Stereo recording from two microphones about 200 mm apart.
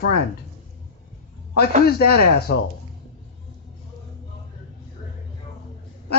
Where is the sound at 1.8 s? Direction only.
50° left (ahead or behind).